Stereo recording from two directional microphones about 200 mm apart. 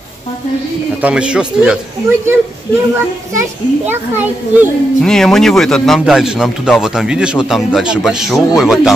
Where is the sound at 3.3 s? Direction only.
15° right (ahead or behind).